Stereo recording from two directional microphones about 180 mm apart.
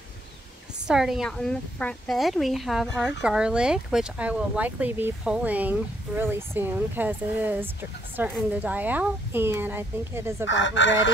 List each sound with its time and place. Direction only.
0.8 s a woman's voice: centre (ahead or behind)
10.5 s speech: 90° left